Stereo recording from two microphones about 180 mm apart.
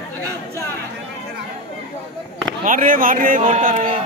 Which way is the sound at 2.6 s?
50° right (ahead or behind).